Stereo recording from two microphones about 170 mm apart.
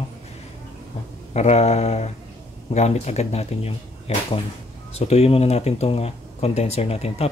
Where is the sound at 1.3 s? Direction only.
40° left (ahead or behind).